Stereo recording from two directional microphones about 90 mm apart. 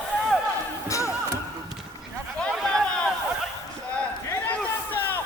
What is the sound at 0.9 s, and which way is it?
Music, 35° left (ahead or behind).